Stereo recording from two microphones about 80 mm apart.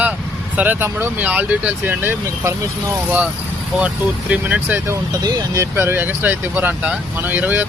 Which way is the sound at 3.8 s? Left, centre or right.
Centre.